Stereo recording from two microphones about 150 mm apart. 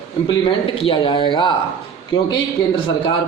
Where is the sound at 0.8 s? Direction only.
35° left (ahead or behind).